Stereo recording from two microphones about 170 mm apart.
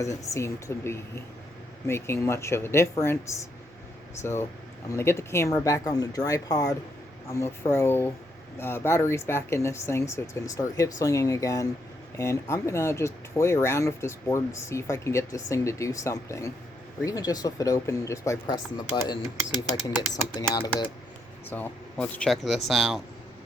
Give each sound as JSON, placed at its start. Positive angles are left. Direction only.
{"t": 0.0, "sound": "speech", "side_deg": 20}
{"t": 21.5, "sound": "speech", "side_deg": 10}